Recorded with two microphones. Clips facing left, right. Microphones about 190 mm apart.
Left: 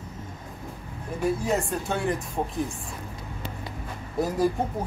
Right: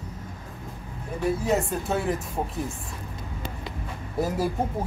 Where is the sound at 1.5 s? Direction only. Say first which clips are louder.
Right 2 dB; centre (ahead or behind).